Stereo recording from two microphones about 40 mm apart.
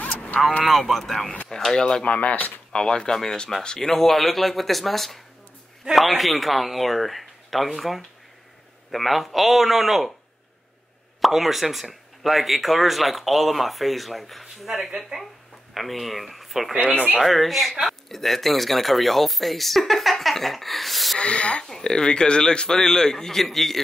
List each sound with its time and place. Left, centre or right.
0.7 s a man's voice: centre
1.9 s speech: left
2.3 s speech: left
2.7 s speech: centre
3.9 s speech: centre
11.1 s speech: centre
21.2 s a man's voice: left; by 23.8 s centre